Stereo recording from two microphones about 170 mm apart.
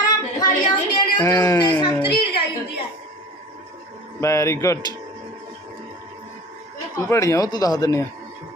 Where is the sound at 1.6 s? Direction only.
25° left (ahead or behind).